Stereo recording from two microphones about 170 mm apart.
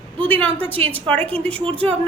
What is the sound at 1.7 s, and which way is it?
Speech, 35° right (ahead or behind).